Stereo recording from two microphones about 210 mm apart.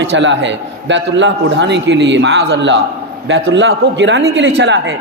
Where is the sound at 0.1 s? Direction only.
60° right (ahead or behind).